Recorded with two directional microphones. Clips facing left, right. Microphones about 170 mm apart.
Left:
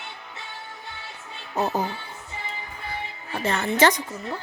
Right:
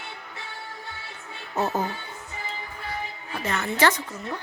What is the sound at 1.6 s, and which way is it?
Speech, 15° left (ahead or behind).